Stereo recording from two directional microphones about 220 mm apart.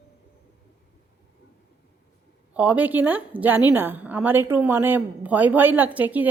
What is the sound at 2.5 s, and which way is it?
A woman's voice, 5° right (ahead or behind).